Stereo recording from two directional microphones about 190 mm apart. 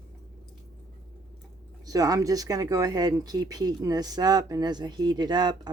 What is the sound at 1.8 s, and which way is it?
Speech, 20° right (ahead or behind).